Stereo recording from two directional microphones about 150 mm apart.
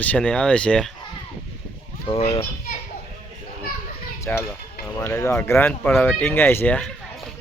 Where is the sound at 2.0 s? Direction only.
40° left (ahead or behind).